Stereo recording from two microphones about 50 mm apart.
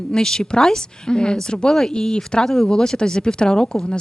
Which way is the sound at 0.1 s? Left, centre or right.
Centre.